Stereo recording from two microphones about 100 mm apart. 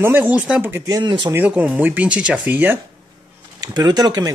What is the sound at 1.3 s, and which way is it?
Speech, 15° right (ahead or behind).